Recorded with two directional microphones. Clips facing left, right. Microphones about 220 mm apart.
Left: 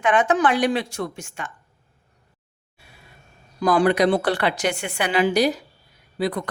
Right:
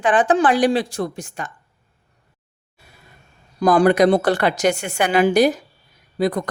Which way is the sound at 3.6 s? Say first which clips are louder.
Right 4 dB; 45° right (ahead or behind).